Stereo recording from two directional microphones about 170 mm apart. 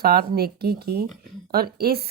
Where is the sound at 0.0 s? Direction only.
65° right (ahead or behind).